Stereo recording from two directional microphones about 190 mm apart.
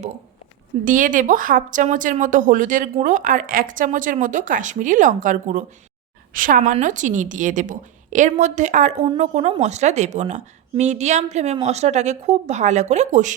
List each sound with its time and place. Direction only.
0.9 s a woman's voice: 45° right (ahead or behind)